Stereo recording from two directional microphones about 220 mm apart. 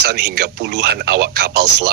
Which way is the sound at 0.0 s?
50° right (ahead or behind).